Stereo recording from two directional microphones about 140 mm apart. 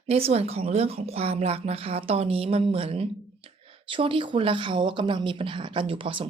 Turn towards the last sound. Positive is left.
turn(degrees=-40)  # may be behind; listen again after turning